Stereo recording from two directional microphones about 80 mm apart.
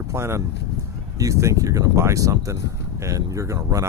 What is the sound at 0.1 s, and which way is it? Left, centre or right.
Speech, right.